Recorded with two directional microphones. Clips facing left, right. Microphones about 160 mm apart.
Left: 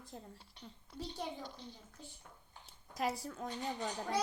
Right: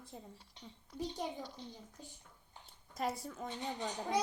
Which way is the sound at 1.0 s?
15° right (ahead or behind).